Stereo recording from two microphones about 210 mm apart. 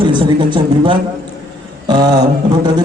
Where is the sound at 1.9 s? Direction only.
20° right (ahead or behind).